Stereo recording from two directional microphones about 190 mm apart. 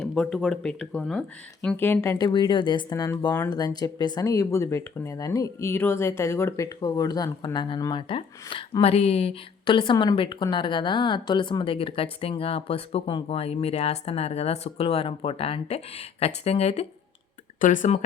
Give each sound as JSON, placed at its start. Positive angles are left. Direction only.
{"t": 0.0, "sound": "speech", "side_deg": 0}